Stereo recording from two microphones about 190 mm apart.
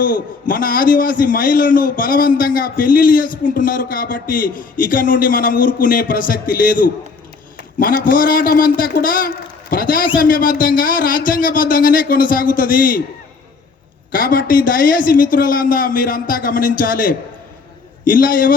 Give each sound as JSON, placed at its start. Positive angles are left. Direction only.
{"t": 0.0, "sound": "a man's voice", "side_deg": 45}
{"t": 14.1, "sound": "a man's voice", "side_deg": 45}